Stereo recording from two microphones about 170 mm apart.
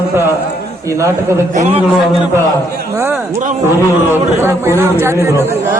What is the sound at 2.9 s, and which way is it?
A man's voice, 15° right (ahead or behind).